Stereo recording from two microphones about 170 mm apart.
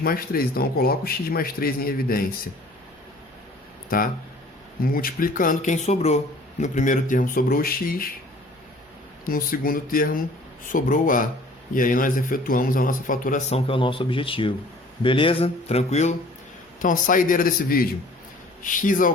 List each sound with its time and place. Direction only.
0.0 s speech: 60° left (ahead or behind)
3.8 s a man's voice: 60° left (ahead or behind)
9.2 s a man's voice: 55° left (ahead or behind)
13.5 s speech: 30° left (ahead or behind)
16.8 s a man's voice: 50° left (ahead or behind)